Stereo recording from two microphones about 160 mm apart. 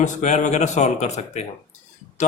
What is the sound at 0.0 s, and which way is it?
A man's voice, 45° left (ahead or behind).